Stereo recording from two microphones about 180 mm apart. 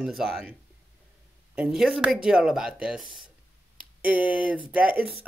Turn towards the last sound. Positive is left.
turn(degrees=-5)  # may be behind; listen again after turning